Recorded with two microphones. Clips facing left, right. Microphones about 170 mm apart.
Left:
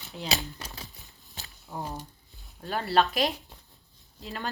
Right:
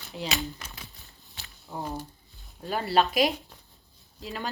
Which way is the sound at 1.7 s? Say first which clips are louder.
Right 1 dB; 10° left (ahead or behind).